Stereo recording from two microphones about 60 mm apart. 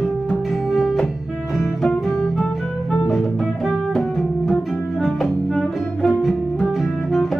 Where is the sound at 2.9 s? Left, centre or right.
Centre.